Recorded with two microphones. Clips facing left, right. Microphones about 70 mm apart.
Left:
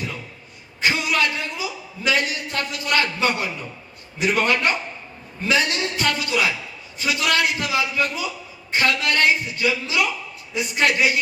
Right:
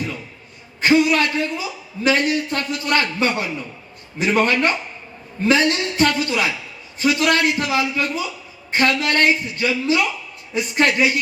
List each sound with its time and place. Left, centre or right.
0.8 s a man's voice: right